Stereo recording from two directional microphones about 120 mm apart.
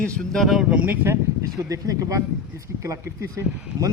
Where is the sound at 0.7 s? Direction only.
15° right (ahead or behind).